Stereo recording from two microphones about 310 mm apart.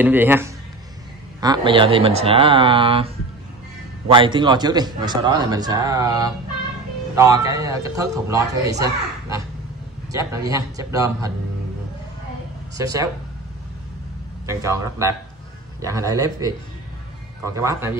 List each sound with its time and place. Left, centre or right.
0.0 s speech: centre
4.1 s speech: centre
12.7 s speech: centre
14.4 s speech: centre
17.6 s speech: centre